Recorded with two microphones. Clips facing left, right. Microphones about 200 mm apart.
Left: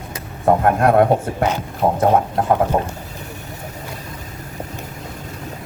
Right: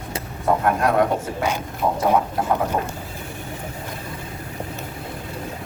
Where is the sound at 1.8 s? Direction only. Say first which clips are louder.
Left 4 dB; 40° left (ahead or behind).